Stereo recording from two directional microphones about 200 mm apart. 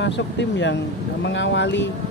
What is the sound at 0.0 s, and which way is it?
Speech, 60° left (ahead or behind).